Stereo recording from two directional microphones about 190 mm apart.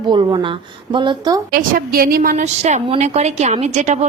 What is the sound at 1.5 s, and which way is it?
A woman's voice, 50° right (ahead or behind).